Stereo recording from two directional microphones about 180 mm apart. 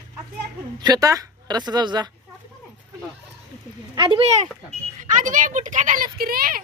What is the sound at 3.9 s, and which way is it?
Speech, 25° right (ahead or behind).